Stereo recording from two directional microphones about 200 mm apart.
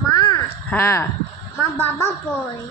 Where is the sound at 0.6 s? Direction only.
10° left (ahead or behind).